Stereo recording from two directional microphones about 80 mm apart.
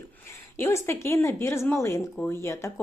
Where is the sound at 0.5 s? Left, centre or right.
Left.